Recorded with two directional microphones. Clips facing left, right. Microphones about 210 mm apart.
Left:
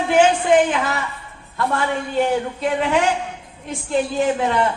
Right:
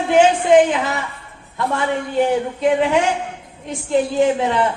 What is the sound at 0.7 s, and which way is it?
Speech, 20° right (ahead or behind).